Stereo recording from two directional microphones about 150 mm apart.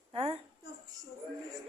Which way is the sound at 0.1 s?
40° right (ahead or behind).